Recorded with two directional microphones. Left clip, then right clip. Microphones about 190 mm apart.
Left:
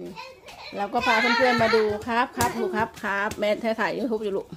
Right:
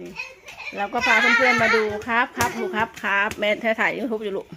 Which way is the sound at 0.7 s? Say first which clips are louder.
Right 3 dB; 10° right (ahead or behind).